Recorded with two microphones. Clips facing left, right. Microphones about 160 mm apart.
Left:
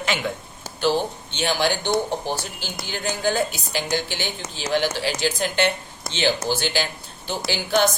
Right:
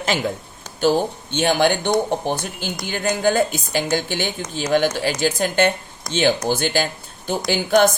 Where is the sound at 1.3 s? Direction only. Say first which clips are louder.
Right 5 dB; 55° right (ahead or behind).